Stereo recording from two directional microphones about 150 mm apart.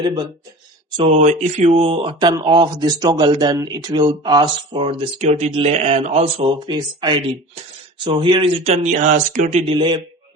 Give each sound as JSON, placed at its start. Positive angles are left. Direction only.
{"t": 0.0, "sound": "speech", "side_deg": -30}
{"t": 1.1, "sound": "speech", "side_deg": -50}
{"t": 6.7, "sound": "speech", "side_deg": -30}
{"t": 9.7, "sound": "speech", "side_deg": -30}